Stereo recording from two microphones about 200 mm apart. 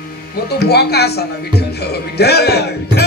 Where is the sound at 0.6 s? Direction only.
55° left (ahead or behind).